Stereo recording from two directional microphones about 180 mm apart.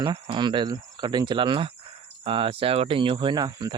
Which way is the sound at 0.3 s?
25° right (ahead or behind).